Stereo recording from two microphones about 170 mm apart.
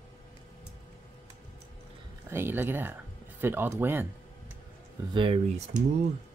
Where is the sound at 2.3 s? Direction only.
15° right (ahead or behind).